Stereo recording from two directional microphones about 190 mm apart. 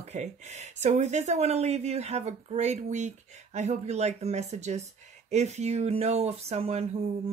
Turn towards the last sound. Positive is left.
turn(degrees=-35)  # may be behind; listen again after turning